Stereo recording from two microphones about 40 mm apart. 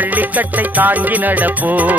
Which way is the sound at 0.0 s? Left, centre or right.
Right.